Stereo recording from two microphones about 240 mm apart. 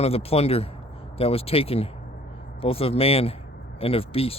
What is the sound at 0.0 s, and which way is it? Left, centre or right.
Speech, left.